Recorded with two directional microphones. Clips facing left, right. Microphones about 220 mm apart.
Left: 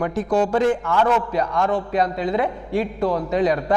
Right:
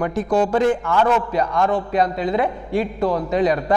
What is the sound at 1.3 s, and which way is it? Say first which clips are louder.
A man's voice: right 1 dB; 10° right (ahead or behind).